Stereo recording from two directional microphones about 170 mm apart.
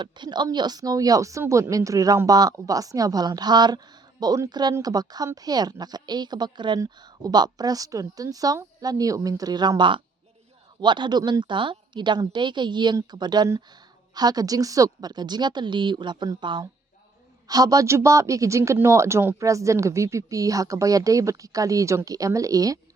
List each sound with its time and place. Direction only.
0.0 s speech: 25° right (ahead or behind)